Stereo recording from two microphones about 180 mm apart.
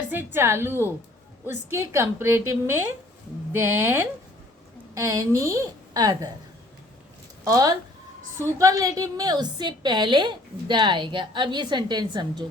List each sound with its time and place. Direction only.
0.1 s a woman's voice: 10° right (ahead or behind)
7.4 s a woman's voice: 20° right (ahead or behind)